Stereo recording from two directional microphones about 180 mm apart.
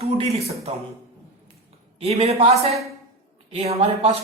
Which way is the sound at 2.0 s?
35° right (ahead or behind).